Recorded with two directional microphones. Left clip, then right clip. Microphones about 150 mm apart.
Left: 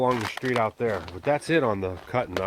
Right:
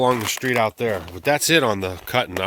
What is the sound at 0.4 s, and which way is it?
Speech, 55° right (ahead or behind).